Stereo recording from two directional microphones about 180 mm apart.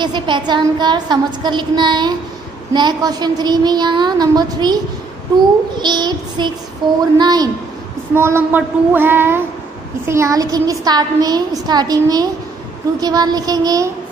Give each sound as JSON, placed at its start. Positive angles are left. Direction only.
{"t": 0.0, "sound": "a woman's voice", "side_deg": -25}
{"t": 8.1, "sound": "child singing", "side_deg": -15}
{"t": 10.0, "sound": "a woman's voice", "side_deg": -15}